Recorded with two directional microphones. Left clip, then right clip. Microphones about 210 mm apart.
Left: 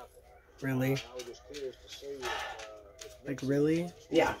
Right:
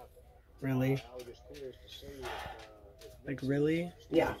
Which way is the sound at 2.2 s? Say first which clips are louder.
Left 5 dB; centre (ahead or behind).